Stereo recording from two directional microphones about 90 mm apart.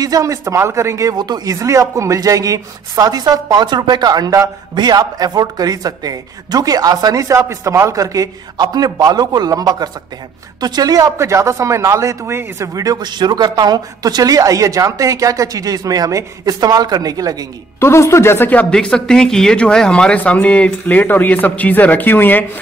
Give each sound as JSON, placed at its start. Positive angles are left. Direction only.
{"t": 0.0, "sound": "speech", "side_deg": -40}
{"t": 1.1, "sound": "speech", "side_deg": -50}
{"t": 17.7, "sound": "speech", "side_deg": 30}